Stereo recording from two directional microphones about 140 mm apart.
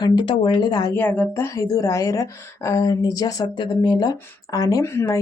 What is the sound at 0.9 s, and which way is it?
Speech, 15° left (ahead or behind).